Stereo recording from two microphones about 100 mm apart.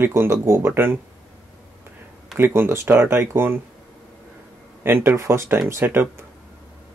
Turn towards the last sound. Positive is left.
turn(degrees=-25)  # may be behind; listen again after turning